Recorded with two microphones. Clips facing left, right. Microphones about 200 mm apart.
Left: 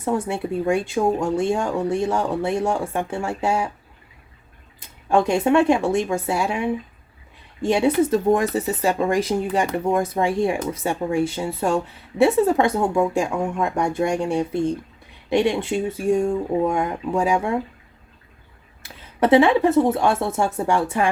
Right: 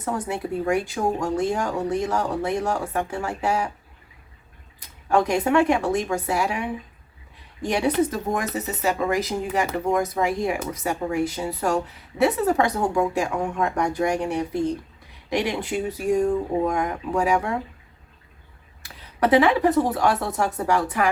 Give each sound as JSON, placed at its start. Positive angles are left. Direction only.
{"t": 0.0, "sound": "speech", "side_deg": 25}
{"t": 4.8, "sound": "speech", "side_deg": 25}
{"t": 19.2, "sound": "speech", "side_deg": 25}